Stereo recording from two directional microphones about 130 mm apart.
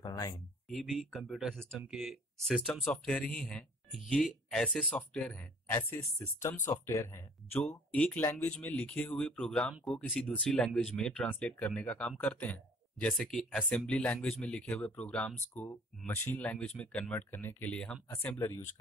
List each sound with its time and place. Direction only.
0.0 s a sound: 30° left (ahead or behind)
0.7 s speech: centre (ahead or behind); by 7.6 s 20° left (ahead or behind)
7.6 s speech: 10° left (ahead or behind)